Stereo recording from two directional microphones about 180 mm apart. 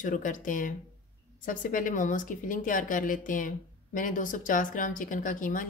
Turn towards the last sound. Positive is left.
turn(degrees=50)  # may be behind; listen again after turning